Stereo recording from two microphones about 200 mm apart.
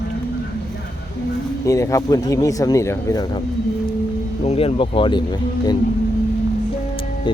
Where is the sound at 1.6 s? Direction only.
15° left (ahead or behind).